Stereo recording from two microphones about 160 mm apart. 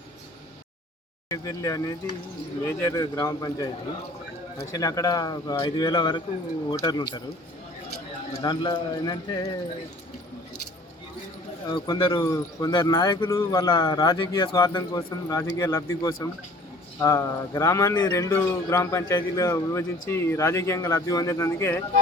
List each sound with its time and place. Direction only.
1.3 s speech: 20° left (ahead or behind)
4.7 s speech: 20° left (ahead or behind)
8.3 s speech: 30° left (ahead or behind)
11.7 s speech: 30° left (ahead or behind)
13.2 s speech: 15° left (ahead or behind)